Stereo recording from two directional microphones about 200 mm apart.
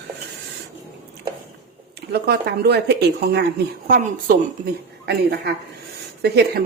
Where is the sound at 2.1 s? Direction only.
55° right (ahead or behind).